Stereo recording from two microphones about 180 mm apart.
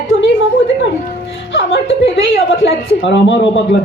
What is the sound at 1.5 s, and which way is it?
A woman's voice, 90° left.